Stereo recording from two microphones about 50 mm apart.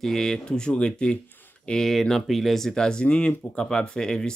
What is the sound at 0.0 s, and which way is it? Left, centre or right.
Speech, centre.